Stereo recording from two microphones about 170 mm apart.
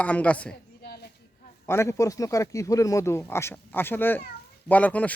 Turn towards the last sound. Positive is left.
turn(degrees=10)  # may be behind; listen again after turning